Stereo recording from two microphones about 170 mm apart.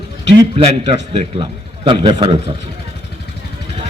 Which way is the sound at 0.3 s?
35° right (ahead or behind).